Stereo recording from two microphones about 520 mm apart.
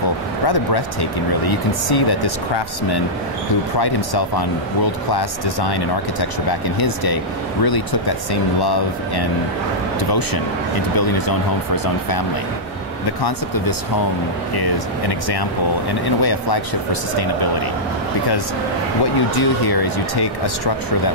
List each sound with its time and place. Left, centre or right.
1.4 s speech: left
8.3 s speech: left
14.6 s speech: left
19.3 s speech: left